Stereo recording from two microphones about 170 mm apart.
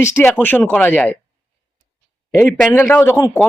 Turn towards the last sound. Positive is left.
turn(degrees=10)  # may be behind; listen again after turning